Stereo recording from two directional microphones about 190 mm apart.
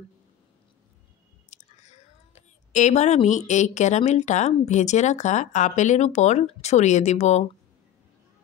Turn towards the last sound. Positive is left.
turn(degrees=35)  # may be behind; listen again after turning